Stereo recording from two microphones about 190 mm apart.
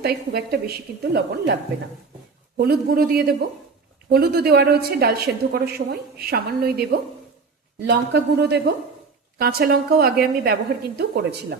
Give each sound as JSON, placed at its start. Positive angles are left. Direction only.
{"t": 0.0, "sound": "a woman's voice", "side_deg": -55}
{"t": 2.6, "sound": "a woman's voice", "side_deg": -50}
{"t": 7.9, "sound": "a woman's voice", "side_deg": -60}